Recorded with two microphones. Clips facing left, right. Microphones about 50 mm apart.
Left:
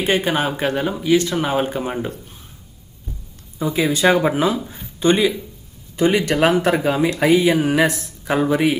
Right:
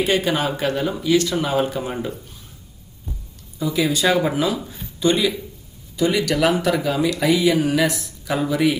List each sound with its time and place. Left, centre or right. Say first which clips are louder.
0.0 s speech: left 1 dB; left
3.6 s speech: left 2 dB; left